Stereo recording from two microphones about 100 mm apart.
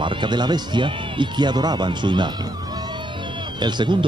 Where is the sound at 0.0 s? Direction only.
55° right (ahead or behind).